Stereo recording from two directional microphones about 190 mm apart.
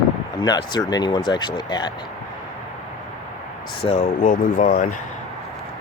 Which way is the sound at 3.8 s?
35° left (ahead or behind).